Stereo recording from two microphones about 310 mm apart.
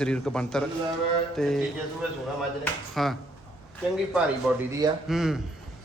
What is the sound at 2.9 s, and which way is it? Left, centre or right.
Speech, centre.